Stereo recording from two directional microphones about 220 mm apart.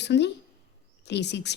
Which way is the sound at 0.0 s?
50° left (ahead or behind).